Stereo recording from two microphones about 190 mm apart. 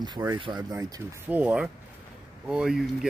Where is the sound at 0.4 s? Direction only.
25° right (ahead or behind).